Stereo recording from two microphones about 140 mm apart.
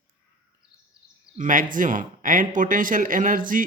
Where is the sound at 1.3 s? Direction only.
65° right (ahead or behind).